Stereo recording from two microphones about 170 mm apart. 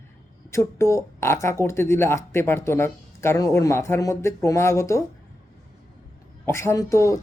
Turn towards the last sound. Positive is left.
turn(degrees=15)  # may be behind; listen again after turning